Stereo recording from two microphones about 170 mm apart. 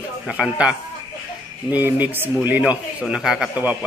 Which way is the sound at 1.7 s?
10° right (ahead or behind).